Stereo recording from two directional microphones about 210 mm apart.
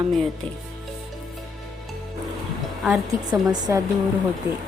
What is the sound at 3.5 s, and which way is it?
Speech, 20° right (ahead or behind).